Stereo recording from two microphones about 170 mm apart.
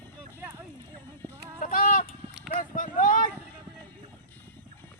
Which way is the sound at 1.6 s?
50° left (ahead or behind).